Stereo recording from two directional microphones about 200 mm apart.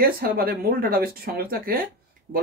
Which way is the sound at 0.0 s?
50° right (ahead or behind).